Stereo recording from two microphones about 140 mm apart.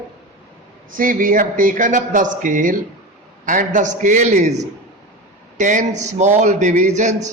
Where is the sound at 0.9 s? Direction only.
75° right (ahead or behind); by 7.3 s 55° right (ahead or behind).